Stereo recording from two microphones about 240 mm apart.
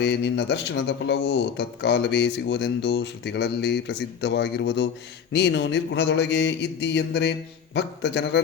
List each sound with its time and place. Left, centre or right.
0.0 s speech: left